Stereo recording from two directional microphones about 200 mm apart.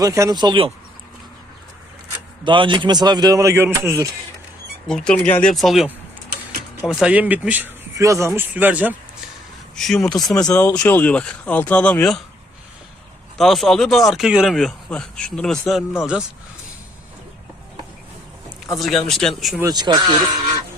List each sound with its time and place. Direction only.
0.0 s speech: 15° right (ahead or behind)
2.4 s speech: 25° right (ahead or behind)
4.9 s speech: 5° left (ahead or behind)
9.7 s speech: centre (ahead or behind)
10.3 s speech: 15° left (ahead or behind)
13.3 s speech: centre (ahead or behind)
18.8 s speech: centre (ahead or behind)
19.6 s speech: 20° right (ahead or behind)